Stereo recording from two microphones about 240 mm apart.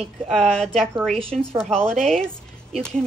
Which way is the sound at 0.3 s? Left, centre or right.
Centre.